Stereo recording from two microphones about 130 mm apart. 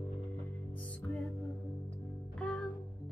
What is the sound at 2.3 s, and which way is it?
Music, 5° left (ahead or behind).